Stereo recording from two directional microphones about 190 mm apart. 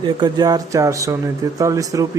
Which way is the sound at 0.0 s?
20° right (ahead or behind).